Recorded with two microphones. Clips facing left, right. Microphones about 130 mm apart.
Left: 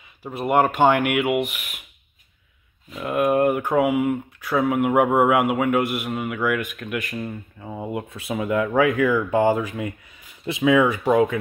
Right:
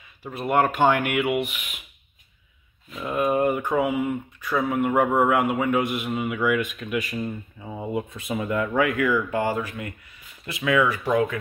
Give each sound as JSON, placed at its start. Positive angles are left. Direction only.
{"t": 0.2, "sound": "a man's voice", "side_deg": 10}
{"t": 2.9, "sound": "a man's voice", "side_deg": 5}